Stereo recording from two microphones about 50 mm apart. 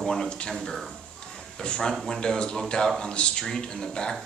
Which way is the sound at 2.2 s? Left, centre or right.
Centre.